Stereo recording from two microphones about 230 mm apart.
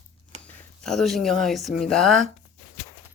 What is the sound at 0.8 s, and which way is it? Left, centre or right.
Speech, centre.